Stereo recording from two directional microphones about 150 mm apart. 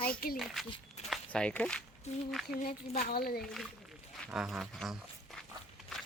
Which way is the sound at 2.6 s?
80° left.